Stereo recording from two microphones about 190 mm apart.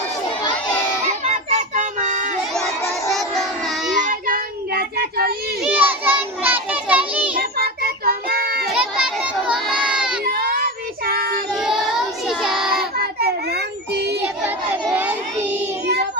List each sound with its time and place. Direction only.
1.0 s music: 35° right (ahead or behind)
3.1 s music: centre (ahead or behind)
4.0 s child singing: 45° right (ahead or behind)
5.6 s children playing: 10° right (ahead or behind)
7.3 s child singing: 50° right (ahead or behind)
8.7 s a sound: 5° right (ahead or behind)
9.9 s crowd: 5° right (ahead or behind)
10.2 s child singing: 50° right (ahead or behind)
11.5 s child singing: centre (ahead or behind)
13.0 s a sound: 55° right (ahead or behind)
14.8 s child singing: 10° right (ahead or behind)